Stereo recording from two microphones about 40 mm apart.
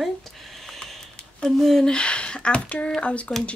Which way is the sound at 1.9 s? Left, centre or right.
Left.